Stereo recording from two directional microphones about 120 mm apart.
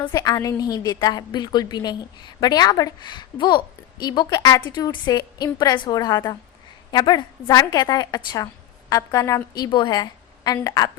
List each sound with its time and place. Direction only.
0.1 s a woman's voice: 30° left (ahead or behind)
9.6 s a woman's voice: 40° left (ahead or behind)